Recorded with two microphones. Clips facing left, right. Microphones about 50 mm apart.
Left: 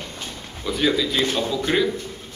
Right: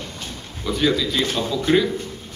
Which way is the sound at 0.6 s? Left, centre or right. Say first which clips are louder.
Right 1 dB; centre.